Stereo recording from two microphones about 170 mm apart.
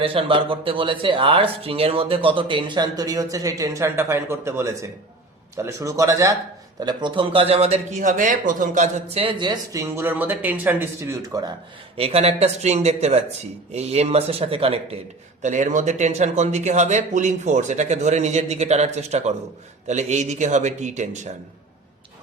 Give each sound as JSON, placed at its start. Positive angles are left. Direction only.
{"t": 0.0, "sound": "speech", "side_deg": -35}
{"t": 11.9, "sound": "speech", "side_deg": -35}
{"t": 15.4, "sound": "speech", "side_deg": -45}